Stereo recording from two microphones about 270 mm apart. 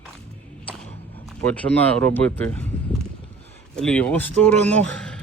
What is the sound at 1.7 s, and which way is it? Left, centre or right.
Speech, left.